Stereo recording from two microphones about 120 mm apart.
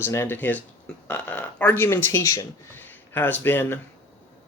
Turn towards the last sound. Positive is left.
turn(degrees=15)  # may be behind; listen again after turning